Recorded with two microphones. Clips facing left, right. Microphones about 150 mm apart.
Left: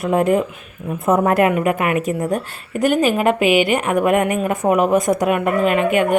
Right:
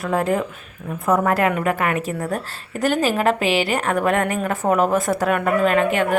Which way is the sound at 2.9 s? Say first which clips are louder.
Left 2 dB; 35° right (ahead or behind).